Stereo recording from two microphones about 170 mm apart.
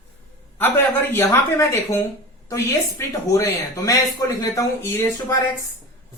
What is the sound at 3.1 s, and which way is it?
Speech, 20° left (ahead or behind).